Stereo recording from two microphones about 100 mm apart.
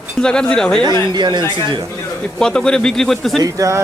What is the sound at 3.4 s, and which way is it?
Speech, 35° right (ahead or behind).